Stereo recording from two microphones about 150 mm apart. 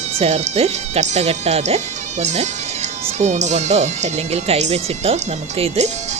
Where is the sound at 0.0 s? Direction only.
45° right (ahead or behind).